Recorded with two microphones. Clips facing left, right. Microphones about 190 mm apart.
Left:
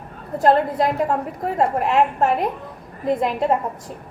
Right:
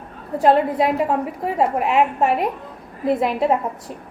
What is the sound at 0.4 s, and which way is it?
A woman's voice, centre (ahead or behind).